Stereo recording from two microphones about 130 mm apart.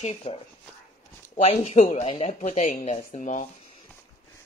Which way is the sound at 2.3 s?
70° left (ahead or behind).